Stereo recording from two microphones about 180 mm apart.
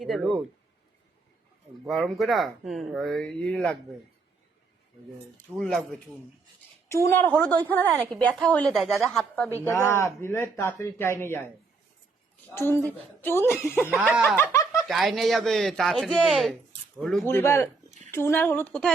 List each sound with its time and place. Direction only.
0.0 s speech: centre (ahead or behind)
1.9 s speech: centre (ahead or behind)
5.5 s speech: 5° left (ahead or behind)
6.9 s a woman's voice: 15° left (ahead or behind)
9.6 s a woman's voice: 15° left (ahead or behind)
12.5 s a woman's voice: 15° left (ahead or behind)
13.9 s speech: 5° right (ahead or behind)
14.5 s snicker: 20° left (ahead or behind)
14.8 s speech: centre (ahead or behind)
17.2 s a woman's voice: 15° left (ahead or behind)